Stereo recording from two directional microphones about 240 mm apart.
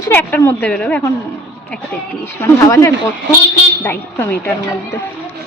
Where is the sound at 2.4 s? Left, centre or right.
Centre.